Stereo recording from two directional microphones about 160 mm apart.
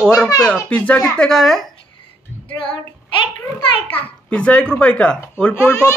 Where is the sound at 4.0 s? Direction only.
10° left (ahead or behind).